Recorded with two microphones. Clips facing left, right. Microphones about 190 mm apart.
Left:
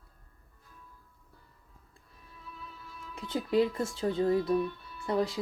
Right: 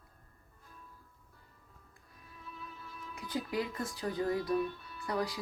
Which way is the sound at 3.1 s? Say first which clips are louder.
Left 7 dB; 25° left (ahead or behind).